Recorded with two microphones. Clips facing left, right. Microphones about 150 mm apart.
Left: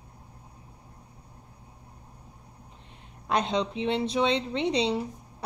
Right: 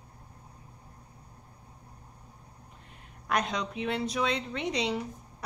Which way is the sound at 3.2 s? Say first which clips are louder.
Left 4 dB; 25° left (ahead or behind).